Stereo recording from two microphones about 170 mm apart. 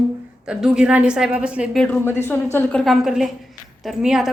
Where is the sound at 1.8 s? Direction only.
10° left (ahead or behind).